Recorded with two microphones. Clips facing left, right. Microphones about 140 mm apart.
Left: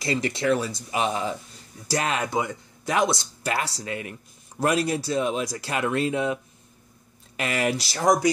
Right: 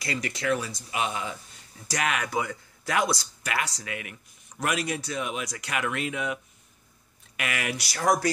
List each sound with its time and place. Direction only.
0.0 s speech: 25° left (ahead or behind)